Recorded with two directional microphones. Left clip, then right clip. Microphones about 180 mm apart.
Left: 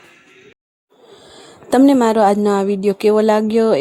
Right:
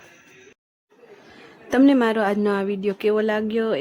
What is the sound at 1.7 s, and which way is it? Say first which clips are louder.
A woman's voice: left 6 dB; 20° left (ahead or behind).